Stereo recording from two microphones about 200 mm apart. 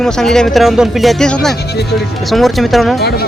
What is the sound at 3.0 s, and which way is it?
Speech, 50° left (ahead or behind).